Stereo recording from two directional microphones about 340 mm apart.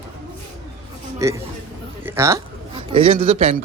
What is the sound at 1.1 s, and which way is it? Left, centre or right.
Speech, centre.